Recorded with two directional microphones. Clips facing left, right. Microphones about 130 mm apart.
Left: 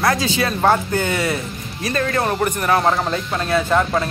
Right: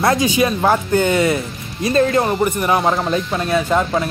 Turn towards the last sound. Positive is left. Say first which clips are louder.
# right 1 dB
turn(degrees=-15)  # may be behind; listen again after turning